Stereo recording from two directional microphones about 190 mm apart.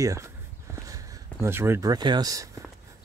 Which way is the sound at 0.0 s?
15° right (ahead or behind).